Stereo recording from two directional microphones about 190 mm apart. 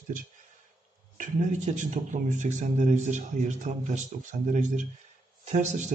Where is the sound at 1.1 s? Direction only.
40° right (ahead or behind).